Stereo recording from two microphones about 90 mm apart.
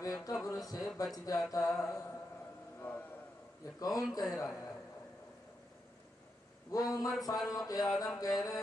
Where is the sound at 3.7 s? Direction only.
45° left (ahead or behind).